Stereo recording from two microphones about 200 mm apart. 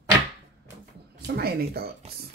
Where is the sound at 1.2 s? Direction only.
50° right (ahead or behind).